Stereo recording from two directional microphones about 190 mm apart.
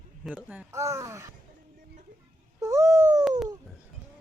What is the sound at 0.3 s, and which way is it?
Speech, 5° right (ahead or behind).